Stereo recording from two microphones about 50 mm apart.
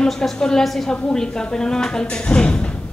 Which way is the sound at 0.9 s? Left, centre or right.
Left.